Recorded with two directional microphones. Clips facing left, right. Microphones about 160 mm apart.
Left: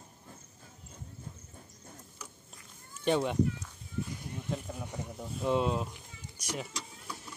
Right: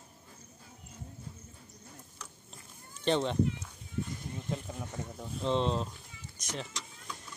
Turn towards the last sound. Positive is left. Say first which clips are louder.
# left 2 dB
turn(degrees=10)  # may be behind; listen again after turning